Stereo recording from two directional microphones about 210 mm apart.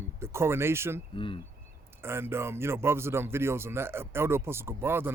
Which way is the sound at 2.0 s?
10° right (ahead or behind).